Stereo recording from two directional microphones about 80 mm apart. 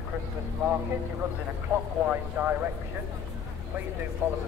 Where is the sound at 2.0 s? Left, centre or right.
Right.